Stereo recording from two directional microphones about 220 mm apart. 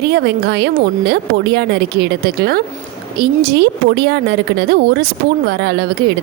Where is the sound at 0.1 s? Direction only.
45° right (ahead or behind).